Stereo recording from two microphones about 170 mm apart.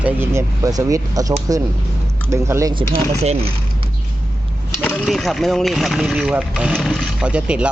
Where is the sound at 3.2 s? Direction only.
40° right (ahead or behind).